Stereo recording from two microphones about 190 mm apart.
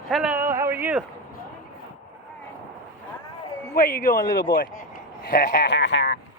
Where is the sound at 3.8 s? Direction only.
55° left (ahead or behind).